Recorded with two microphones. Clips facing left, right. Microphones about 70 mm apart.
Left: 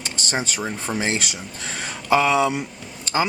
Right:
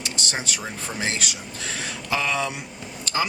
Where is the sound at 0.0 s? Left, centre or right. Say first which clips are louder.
Left 3 dB; left.